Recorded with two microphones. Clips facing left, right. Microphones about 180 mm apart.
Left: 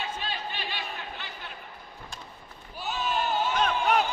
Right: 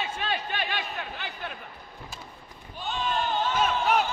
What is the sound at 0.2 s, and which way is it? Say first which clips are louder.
Crowd: right 5 dB; 60° right (ahead or behind).